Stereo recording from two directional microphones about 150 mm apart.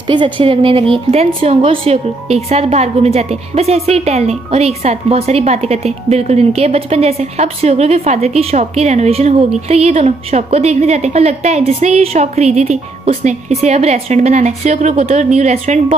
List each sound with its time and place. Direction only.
0.0 s a woman's voice: 30° right (ahead or behind); by 15.8 s 50° right (ahead or behind)